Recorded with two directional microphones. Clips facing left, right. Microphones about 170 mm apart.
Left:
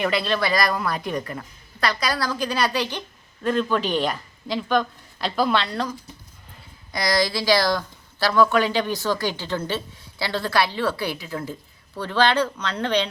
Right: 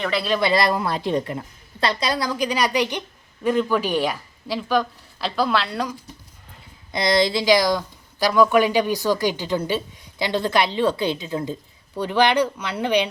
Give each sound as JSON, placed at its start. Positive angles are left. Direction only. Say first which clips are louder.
{"t": 0.0, "sound": "speech", "louder": "left 1 dB", "side_deg": 0}
{"t": 0.3, "sound": "a woman's voice", "louder": "right 3 dB", "side_deg": -20}
{"t": 6.9, "sound": "speech", "louder": "right 3 dB", "side_deg": -25}